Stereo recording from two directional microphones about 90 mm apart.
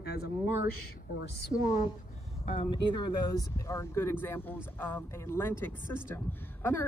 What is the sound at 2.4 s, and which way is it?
Speech, 85° left.